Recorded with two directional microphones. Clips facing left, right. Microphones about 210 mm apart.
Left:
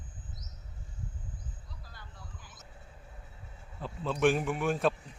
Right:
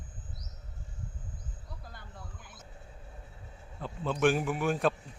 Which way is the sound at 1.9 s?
55° right (ahead or behind).